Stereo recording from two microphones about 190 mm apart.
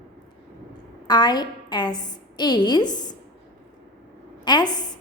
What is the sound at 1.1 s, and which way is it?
A woman's voice, 20° left (ahead or behind).